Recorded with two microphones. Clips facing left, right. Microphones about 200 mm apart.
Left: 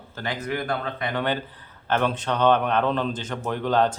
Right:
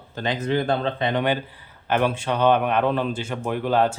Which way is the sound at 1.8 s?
10° right (ahead or behind).